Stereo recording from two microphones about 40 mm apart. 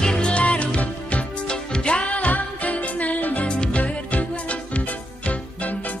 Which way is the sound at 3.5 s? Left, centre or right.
Left.